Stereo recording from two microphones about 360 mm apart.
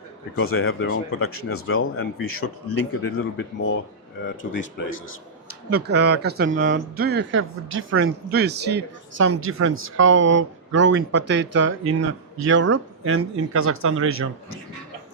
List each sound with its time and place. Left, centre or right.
0.3 s speech: left
5.7 s speech: right